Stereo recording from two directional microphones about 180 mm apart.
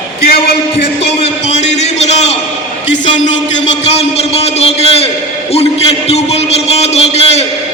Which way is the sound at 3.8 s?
35° left (ahead or behind).